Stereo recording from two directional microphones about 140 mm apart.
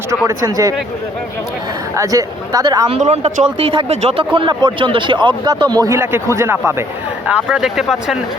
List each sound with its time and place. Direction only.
0.3 s speech: 25° right (ahead or behind)
2.0 s speech: 25° right (ahead or behind)
2.9 s speech: 50° right (ahead or behind); by 6.8 s 20° right (ahead or behind)
7.5 s speech: 5° right (ahead or behind)